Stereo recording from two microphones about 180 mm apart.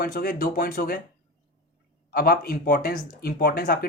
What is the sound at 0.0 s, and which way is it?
Speech, 55° left (ahead or behind).